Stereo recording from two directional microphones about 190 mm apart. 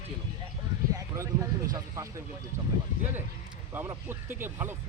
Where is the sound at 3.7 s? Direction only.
10° right (ahead or behind).